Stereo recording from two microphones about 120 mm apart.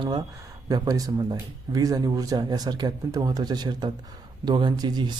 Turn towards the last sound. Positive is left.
turn(degrees=-35)  # may be behind; listen again after turning